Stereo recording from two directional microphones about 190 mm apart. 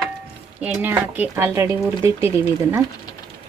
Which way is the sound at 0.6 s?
10° right (ahead or behind).